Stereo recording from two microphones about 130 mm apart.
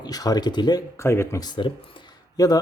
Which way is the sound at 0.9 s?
20° left (ahead or behind).